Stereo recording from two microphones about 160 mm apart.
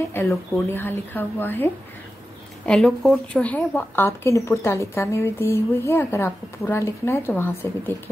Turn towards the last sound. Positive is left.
turn(degrees=15)  # may be behind; listen again after turning